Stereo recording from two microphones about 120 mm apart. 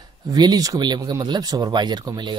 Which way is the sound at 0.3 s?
35° right (ahead or behind).